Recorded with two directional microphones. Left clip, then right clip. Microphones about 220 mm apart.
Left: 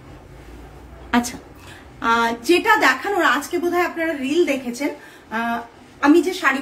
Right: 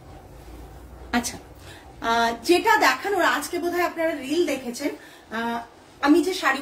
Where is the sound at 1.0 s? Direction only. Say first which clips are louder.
Left 5 dB; 20° left (ahead or behind).